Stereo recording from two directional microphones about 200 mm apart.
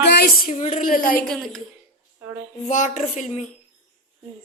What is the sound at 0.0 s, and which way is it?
Speech, 55° left (ahead or behind).